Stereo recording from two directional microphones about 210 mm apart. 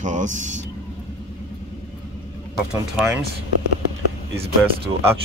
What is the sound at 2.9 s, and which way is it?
Speech, 10° right (ahead or behind).